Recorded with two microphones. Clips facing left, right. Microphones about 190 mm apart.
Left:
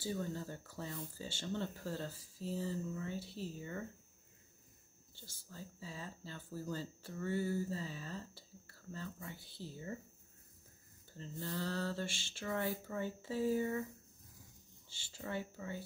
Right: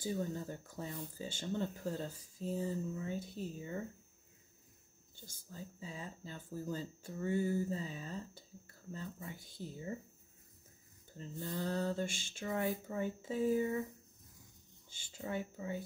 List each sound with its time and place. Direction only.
0.0 s speech: 15° right (ahead or behind)
3.2 s speech: 50° right (ahead or behind)
3.5 s speech: 15° right (ahead or behind)
5.2 s speech: 15° right (ahead or behind)
11.1 s speech: 20° right (ahead or behind)
15.0 s speech: 15° right (ahead or behind)